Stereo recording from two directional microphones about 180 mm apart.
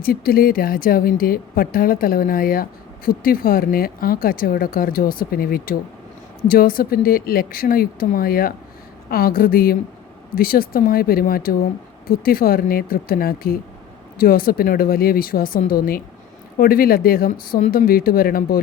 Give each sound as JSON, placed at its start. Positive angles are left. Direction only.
{"t": 0.0, "sound": "speech", "side_deg": 55}